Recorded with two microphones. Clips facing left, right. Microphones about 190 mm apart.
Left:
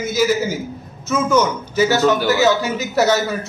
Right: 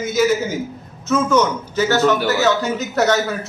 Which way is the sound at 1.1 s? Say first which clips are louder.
Even; 10° left (ahead or behind).